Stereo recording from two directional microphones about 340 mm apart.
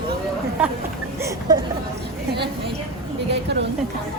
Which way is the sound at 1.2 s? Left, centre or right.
Centre.